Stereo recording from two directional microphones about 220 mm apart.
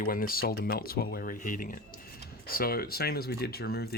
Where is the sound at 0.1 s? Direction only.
40° left (ahead or behind).